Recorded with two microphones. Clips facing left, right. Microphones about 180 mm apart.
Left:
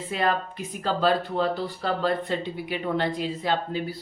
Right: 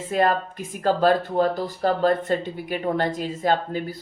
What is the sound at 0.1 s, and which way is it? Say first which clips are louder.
Speech: right 4 dB; 45° right (ahead or behind).